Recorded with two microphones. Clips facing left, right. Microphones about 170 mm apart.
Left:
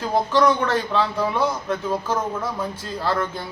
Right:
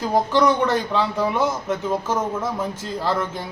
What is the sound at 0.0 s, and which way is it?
A man's voice, 15° right (ahead or behind).